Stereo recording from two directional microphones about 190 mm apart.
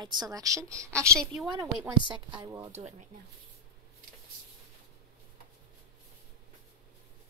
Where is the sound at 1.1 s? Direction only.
Centre (ahead or behind).